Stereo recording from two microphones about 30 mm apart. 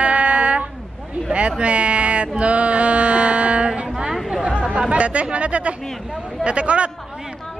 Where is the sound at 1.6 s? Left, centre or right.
Right.